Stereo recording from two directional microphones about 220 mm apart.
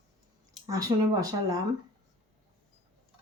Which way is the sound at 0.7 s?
15° right (ahead or behind).